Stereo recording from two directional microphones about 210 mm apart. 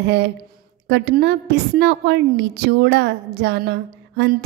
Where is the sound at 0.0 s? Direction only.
55° right (ahead or behind).